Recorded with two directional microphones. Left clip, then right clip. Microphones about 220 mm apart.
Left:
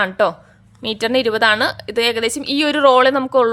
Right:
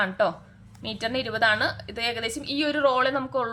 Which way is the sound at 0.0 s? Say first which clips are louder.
Left 7 dB; 50° left (ahead or behind).